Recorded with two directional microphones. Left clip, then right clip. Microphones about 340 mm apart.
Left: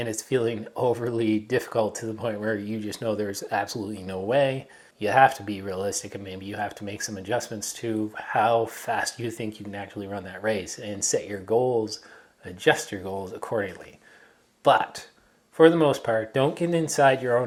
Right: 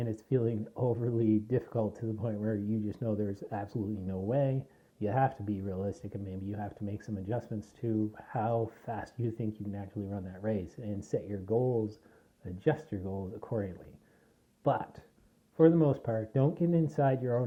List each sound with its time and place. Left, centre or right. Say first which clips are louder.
0.0 s speech: left 7 dB; centre
11.5 s speech: left 8 dB; left
12.5 s speech: left 10 dB; centre